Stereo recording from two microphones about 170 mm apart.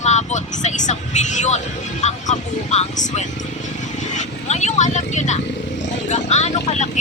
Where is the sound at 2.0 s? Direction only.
40° left (ahead or behind).